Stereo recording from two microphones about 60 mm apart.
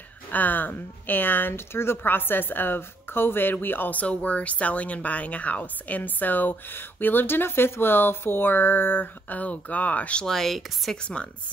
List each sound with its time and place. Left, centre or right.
0.3 s speech: left
1.5 s speech: left
10.2 s speech: centre
11.2 s speech: centre